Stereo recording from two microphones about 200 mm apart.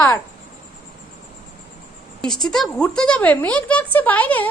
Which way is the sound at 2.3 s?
Centre (ahead or behind).